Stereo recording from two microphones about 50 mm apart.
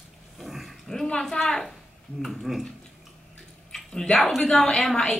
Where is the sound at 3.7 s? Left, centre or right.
Centre.